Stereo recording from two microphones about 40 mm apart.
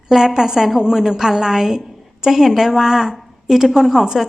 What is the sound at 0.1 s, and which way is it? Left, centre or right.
A woman's voice, centre.